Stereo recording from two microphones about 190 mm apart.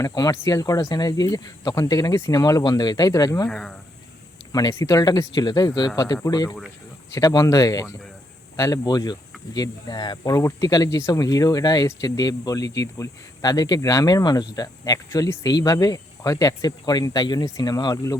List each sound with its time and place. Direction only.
0.0 s speech: 20° left (ahead or behind)
3.5 s speech: 5° left (ahead or behind)
4.5 s speech: 15° left (ahead or behind)